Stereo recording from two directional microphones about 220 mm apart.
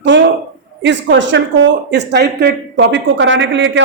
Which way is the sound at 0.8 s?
55° right (ahead or behind).